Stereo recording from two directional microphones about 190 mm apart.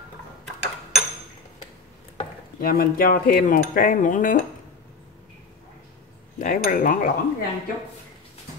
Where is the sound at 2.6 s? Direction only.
50° left (ahead or behind).